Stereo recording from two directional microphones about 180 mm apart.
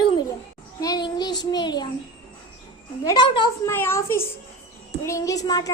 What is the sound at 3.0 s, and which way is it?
A woman's voice, 25° left (ahead or behind).